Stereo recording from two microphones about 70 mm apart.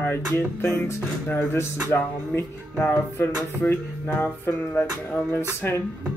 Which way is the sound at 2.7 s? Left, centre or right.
Left.